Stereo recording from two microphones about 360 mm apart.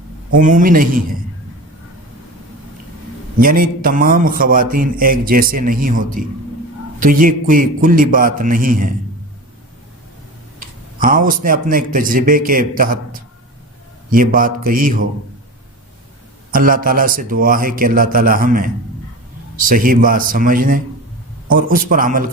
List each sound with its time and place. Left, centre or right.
0.3 s a man's voice: right
3.3 s a man's voice: right
10.6 s a man's voice: right
16.5 s a man's voice: right